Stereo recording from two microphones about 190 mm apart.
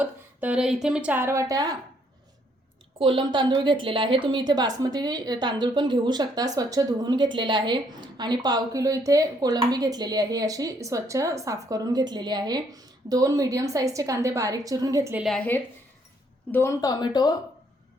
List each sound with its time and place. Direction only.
0.0 s speech: 10° right (ahead or behind)
3.0 s a woman's voice: 25° right (ahead or behind)
15.2 s a woman's voice: 5° left (ahead or behind); by 17.3 s 20° left (ahead or behind)